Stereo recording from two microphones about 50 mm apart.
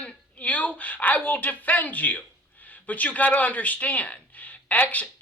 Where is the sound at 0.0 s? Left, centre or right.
Left.